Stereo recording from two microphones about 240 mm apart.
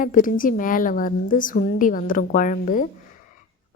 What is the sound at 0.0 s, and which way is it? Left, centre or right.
A woman's voice, left.